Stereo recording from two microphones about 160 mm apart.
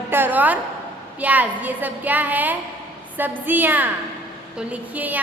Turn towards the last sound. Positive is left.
turn(degrees=-10)  # may be behind; listen again after turning